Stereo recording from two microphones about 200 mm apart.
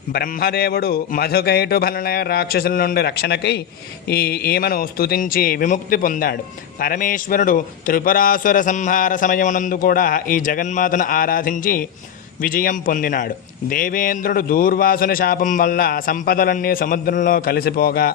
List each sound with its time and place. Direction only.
0.1 s a man's voice: 50° left (ahead or behind)